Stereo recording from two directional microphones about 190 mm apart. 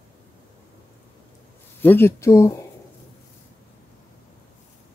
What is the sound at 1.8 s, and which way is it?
Speech, 10° left (ahead or behind).